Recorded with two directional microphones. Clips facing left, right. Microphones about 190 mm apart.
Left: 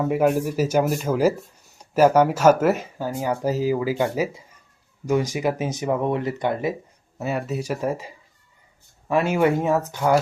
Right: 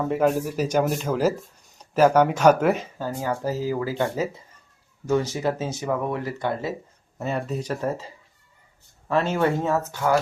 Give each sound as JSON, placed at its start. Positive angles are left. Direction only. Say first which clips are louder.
{"t": 0.0, "sound": "speech", "louder": "left 2 dB", "side_deg": 10}